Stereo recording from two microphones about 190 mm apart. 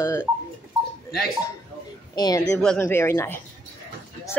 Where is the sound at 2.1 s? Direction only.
20° left (ahead or behind).